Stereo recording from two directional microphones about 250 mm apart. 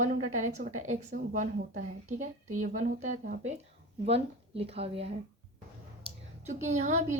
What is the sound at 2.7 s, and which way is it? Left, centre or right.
Speech, right.